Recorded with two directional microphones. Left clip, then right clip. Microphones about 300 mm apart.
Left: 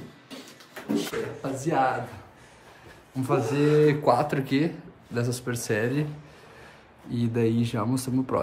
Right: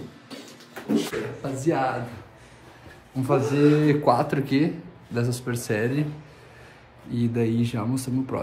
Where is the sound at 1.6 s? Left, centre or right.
Centre.